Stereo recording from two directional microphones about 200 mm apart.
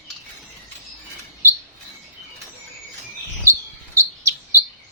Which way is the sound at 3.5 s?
15° right (ahead or behind).